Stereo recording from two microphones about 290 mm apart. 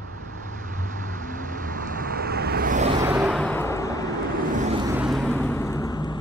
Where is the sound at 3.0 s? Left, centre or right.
Centre.